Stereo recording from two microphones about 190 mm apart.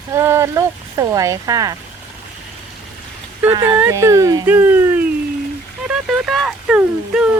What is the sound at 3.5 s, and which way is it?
Speech, 25° right (ahead or behind).